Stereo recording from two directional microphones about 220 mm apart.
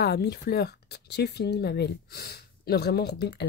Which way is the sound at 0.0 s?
50° left (ahead or behind).